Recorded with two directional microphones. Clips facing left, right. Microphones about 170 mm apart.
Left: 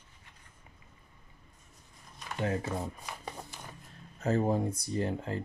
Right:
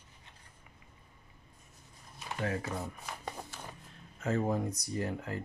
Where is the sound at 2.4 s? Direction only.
25° left (ahead or behind).